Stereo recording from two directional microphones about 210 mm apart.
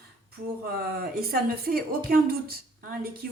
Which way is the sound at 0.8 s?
45° right (ahead or behind).